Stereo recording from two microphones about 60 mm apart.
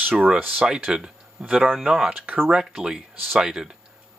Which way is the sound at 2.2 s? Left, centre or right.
Right.